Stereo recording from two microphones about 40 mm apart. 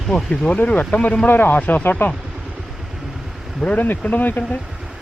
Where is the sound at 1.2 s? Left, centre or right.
Left.